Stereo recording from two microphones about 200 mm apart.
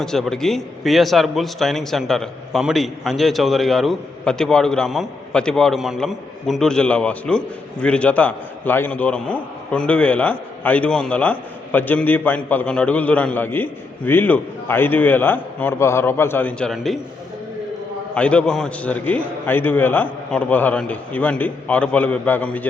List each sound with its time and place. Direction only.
0.0 s a man's voice: centre (ahead or behind)
18.1 s a man's voice: 5° left (ahead or behind)